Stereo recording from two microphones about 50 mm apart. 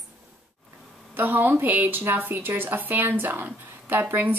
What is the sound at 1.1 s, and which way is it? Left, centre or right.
A woman's voice, right.